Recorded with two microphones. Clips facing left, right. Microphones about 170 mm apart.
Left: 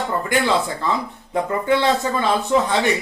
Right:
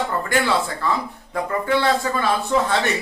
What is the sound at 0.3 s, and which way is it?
Speech, 20° left (ahead or behind).